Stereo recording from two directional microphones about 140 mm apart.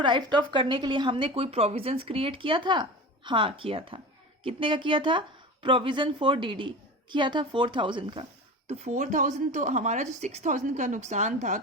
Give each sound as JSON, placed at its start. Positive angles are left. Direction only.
{"t": 0.0, "sound": "a woman's voice", "side_deg": -35}
{"t": 8.6, "sound": "a woman's voice", "side_deg": -50}